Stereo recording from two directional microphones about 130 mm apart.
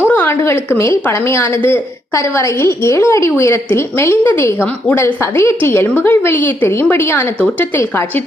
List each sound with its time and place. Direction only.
0.1 s a woman's voice: 15° left (ahead or behind)